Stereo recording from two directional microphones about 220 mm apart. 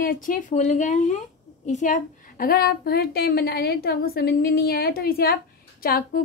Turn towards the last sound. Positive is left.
turn(degrees=40)  # may be behind; listen again after turning